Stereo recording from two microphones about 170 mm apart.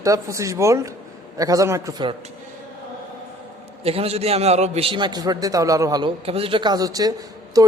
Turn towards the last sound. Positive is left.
turn(degrees=-20)  # may be behind; listen again after turning